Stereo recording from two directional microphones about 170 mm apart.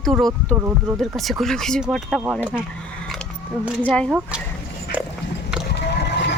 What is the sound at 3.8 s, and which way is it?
Speech, 5° left (ahead or behind).